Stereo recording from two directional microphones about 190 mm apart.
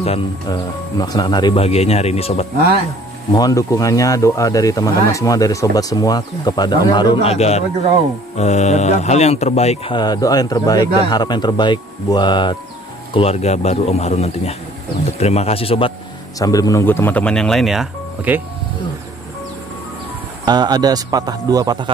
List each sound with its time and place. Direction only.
0.5 s speech: 20° left (ahead or behind)
3.3 s speech: 20° left (ahead or behind)
7.3 s speech: 35° left (ahead or behind)
16.3 s speech: 20° left (ahead or behind); by 18.4 s 5° right (ahead or behind)
20.4 s speech: 20° right (ahead or behind)